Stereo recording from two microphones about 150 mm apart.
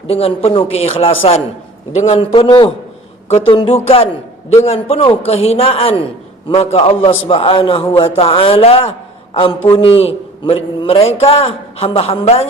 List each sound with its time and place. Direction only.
0.1 s a man's voice: 40° left (ahead or behind)
2.3 s a man's voice: 30° left (ahead or behind)